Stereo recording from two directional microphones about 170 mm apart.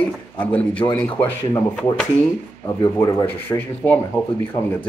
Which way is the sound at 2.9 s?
15° left (ahead or behind).